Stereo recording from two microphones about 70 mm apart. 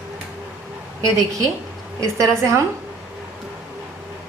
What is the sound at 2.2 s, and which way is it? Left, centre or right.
Speech, right.